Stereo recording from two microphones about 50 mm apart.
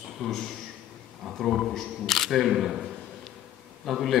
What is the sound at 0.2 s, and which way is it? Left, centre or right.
Speech, centre.